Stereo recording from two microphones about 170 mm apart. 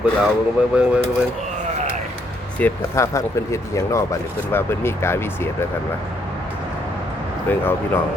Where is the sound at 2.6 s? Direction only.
15° left (ahead or behind).